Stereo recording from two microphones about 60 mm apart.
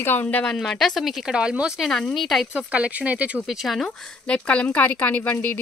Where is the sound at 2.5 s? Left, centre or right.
Right.